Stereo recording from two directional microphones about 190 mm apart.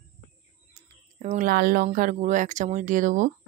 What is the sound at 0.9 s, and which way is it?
Speech, 35° right (ahead or behind).